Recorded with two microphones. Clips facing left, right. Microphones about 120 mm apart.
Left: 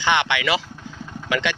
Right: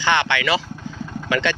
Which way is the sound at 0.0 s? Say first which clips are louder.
Right 1 dB; 15° left (ahead or behind).